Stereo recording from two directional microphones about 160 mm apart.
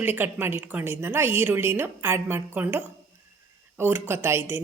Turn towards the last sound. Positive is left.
turn(degrees=-15)  # may be behind; listen again after turning